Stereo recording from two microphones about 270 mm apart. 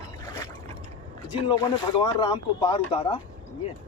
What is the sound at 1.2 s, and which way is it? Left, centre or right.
Speech, centre.